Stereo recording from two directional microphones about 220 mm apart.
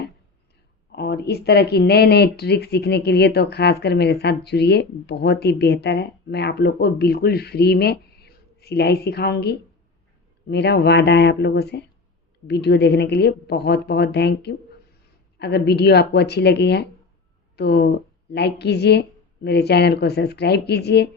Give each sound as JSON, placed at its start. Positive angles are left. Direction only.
{"t": 0.9, "sound": "speech", "side_deg": 50}